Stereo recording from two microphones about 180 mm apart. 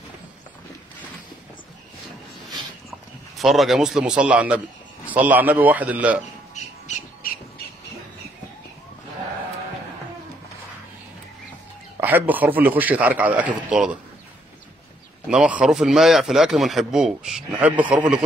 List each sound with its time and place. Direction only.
3.3 s a man's voice: centre (ahead or behind)
6.5 s squawk: 40° left (ahead or behind)
12.0 s a man's voice: 10° right (ahead or behind)
15.2 s a man's voice: 5° right (ahead or behind)